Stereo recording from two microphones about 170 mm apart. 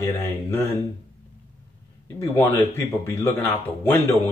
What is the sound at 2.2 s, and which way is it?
Speech, 15° left (ahead or behind).